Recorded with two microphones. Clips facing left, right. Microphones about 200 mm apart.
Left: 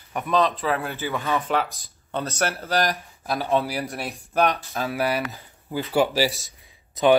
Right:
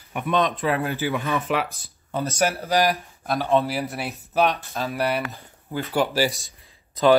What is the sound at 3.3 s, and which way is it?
Speech, centre (ahead or behind).